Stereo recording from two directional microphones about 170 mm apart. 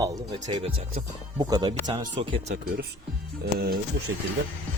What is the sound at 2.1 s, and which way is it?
Speech, 40° right (ahead or behind).